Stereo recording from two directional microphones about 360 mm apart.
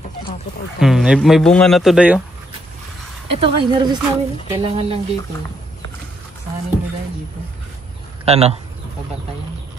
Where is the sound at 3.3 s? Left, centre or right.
Centre.